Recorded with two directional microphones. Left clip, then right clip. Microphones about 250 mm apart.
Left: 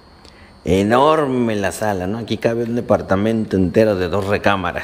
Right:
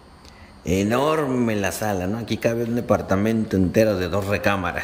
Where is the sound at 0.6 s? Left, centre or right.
Centre.